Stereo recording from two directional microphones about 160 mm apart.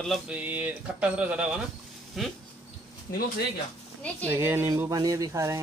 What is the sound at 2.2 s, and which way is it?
Speech, centre (ahead or behind).